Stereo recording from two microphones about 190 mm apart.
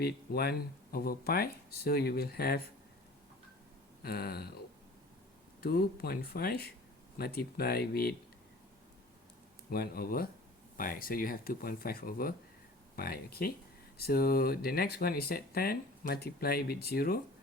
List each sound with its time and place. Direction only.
0.0 s speech: 55° left (ahead or behind)
4.0 s speech: 55° left (ahead or behind)
9.6 s speech: 55° left (ahead or behind)